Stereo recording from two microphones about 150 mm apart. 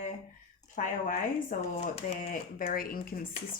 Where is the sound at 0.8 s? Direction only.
60° left (ahead or behind).